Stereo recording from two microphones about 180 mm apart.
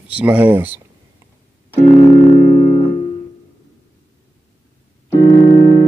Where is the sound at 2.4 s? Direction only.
35° left (ahead or behind).